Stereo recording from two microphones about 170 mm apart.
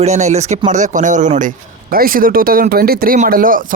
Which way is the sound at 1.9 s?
55° right (ahead or behind).